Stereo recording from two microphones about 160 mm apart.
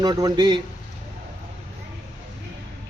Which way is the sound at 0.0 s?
25° right (ahead or behind).